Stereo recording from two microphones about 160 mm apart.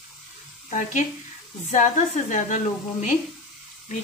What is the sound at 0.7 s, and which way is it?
Speech, 50° left (ahead or behind).